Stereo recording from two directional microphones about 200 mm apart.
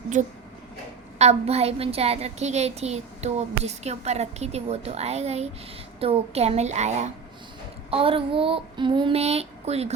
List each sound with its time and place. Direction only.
0.1 s a woman's voice: 35° right (ahead or behind)
7.9 s child singing: 30° right (ahead or behind)